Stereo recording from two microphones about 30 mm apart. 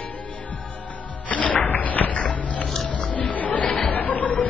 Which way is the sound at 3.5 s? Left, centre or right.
Left.